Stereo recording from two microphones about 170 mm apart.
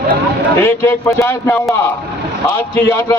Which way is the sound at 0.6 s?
15° left (ahead or behind).